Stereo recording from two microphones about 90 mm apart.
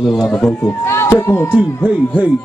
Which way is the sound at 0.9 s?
25° left (ahead or behind).